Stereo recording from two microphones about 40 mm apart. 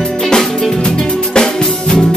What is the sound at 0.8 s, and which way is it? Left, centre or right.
Music, centre.